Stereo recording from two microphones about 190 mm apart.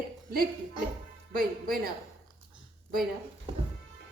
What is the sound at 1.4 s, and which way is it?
Speech, 50° right (ahead or behind).